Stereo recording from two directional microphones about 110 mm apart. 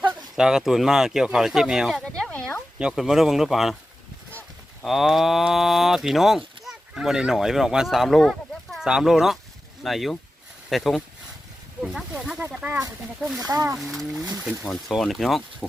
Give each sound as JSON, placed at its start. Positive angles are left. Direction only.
{"t": 0.1, "sound": "speech", "side_deg": -5}
{"t": 2.7, "sound": "speech", "side_deg": -5}
{"t": 4.9, "sound": "speech", "side_deg": 0}
{"t": 11.8, "sound": "a sound", "side_deg": 0}
{"t": 12.5, "sound": "speech", "side_deg": -10}
{"t": 13.4, "sound": "speech", "side_deg": -30}
{"t": 13.7, "sound": "speech", "side_deg": 0}